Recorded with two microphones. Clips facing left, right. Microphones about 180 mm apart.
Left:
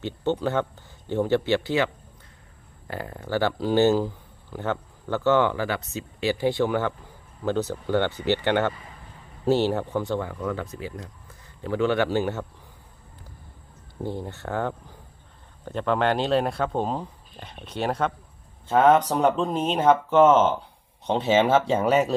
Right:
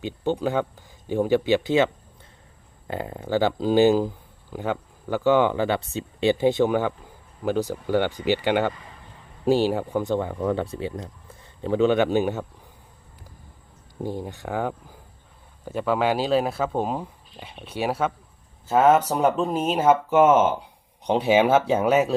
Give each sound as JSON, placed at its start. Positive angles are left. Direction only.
{"t": 0.0, "sound": "speech", "side_deg": -15}
{"t": 10.4, "sound": "a man's voice", "side_deg": -30}
{"t": 14.0, "sound": "speech", "side_deg": -15}